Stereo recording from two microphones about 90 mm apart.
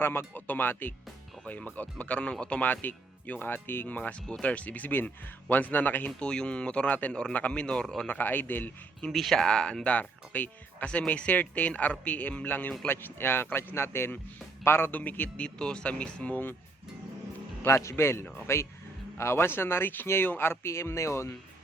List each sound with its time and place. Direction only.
0.0 s speech: 25° left (ahead or behind)
6.1 s speech: 10° left (ahead or behind)
8.0 s speech: 20° left (ahead or behind)
9.0 s speech: 5° left (ahead or behind)
17.6 s speech: 30° left (ahead or behind)